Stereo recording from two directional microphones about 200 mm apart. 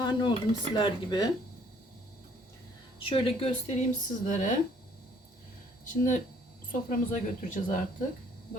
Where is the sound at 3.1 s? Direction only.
30° left (ahead or behind).